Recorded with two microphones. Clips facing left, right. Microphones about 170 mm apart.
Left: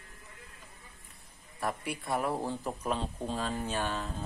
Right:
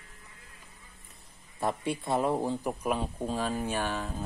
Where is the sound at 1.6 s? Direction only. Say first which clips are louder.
Right 4 dB; 25° right (ahead or behind).